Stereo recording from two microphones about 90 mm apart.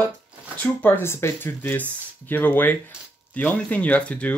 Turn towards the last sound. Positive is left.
turn(degrees=15)  # may be behind; listen again after turning